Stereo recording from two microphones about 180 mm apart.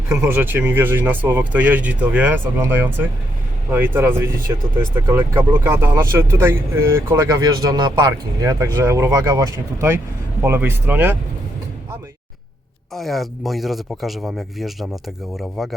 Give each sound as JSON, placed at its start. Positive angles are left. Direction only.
{"t": 0.2, "sound": "speech", "side_deg": -10}
{"t": 12.9, "sound": "speech", "side_deg": 0}